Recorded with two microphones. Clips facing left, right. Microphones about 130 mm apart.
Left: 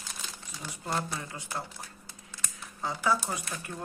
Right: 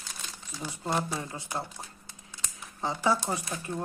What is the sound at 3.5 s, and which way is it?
Speech, 25° right (ahead or behind).